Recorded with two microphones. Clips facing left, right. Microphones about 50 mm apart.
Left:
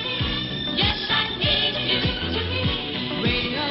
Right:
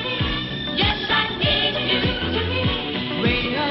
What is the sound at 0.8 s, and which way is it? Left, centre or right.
Music, centre.